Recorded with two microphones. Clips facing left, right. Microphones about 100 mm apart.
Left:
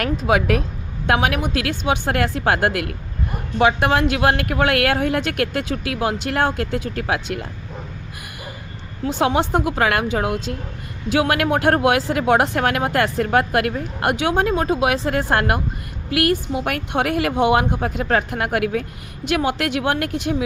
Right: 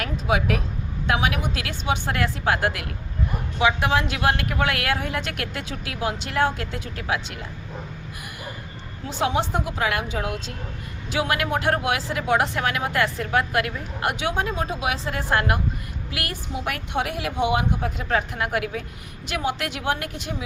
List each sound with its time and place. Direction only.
0.0 s speech: 60° left (ahead or behind)
9.0 s speech: 60° left (ahead or behind)